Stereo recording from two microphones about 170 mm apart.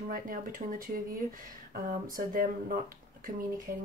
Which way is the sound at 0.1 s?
55° right (ahead or behind).